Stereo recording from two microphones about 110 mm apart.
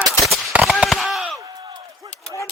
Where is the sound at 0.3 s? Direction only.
Centre (ahead or behind).